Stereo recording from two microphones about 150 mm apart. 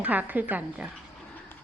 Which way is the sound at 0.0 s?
10° right (ahead or behind).